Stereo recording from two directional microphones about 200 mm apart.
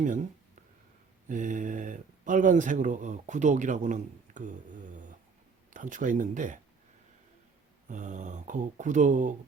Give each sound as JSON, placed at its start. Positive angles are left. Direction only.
{"t": 0.0, "sound": "speech", "side_deg": -40}
{"t": 1.3, "sound": "speech", "side_deg": -40}
{"t": 5.7, "sound": "speech", "side_deg": -40}
{"t": 7.9, "sound": "speech", "side_deg": -40}